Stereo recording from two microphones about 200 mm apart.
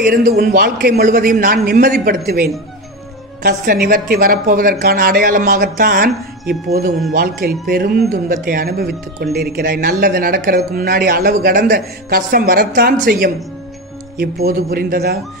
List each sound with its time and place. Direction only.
0.0 s speech: 45° right (ahead or behind)
7.2 s speech: 50° right (ahead or behind)